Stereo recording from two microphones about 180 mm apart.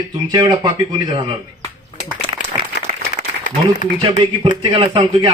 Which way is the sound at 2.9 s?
45° right (ahead or behind).